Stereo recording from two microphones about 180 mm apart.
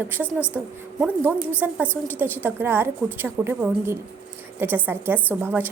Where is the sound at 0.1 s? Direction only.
10° right (ahead or behind).